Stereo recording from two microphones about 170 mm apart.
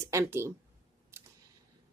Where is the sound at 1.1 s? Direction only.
15° right (ahead or behind).